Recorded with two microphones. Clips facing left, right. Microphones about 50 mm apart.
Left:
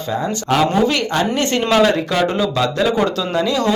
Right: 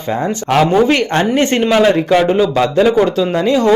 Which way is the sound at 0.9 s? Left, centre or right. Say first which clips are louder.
Right 4 dB; right.